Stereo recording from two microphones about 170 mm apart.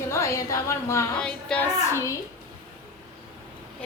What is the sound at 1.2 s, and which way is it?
Speech, 5° left (ahead or behind).